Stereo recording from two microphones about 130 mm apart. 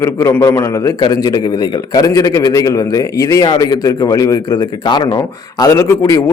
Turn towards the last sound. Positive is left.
turn(degrees=25)  # may be behind; listen again after turning